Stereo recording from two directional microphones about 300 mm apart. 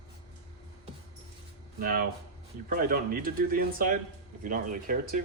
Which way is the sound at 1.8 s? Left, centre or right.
Right.